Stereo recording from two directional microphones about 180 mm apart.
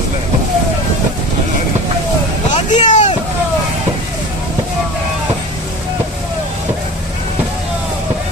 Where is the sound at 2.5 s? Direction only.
40° left (ahead or behind).